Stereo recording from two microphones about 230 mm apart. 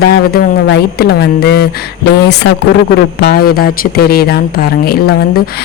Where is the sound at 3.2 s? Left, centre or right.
Left.